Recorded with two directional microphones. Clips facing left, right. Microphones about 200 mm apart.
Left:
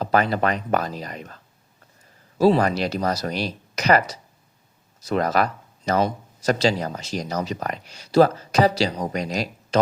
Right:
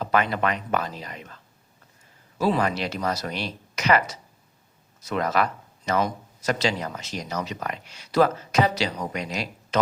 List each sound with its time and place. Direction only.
0.0 s speech: 35° left (ahead or behind)
2.4 s speech: 35° left (ahead or behind)